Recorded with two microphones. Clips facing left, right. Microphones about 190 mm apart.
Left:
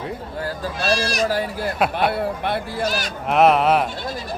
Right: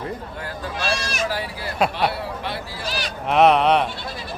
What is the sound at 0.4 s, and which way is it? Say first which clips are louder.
Speech: left 4 dB; 40° left (ahead or behind).